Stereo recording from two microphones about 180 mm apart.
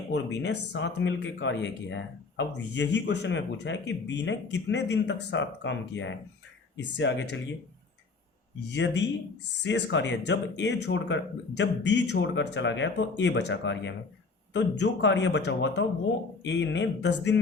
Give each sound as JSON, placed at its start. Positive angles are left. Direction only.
{"t": 0.4, "sound": "speech", "side_deg": 75}
{"t": 8.7, "sound": "speech", "side_deg": 85}
{"t": 16.4, "sound": "speech", "side_deg": 90}